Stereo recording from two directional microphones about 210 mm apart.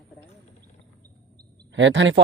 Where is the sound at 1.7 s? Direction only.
60° right (ahead or behind).